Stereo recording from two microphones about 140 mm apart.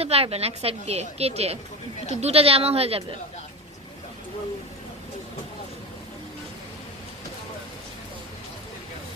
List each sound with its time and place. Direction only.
0.0 s a woman's voice: 45° right (ahead or behind)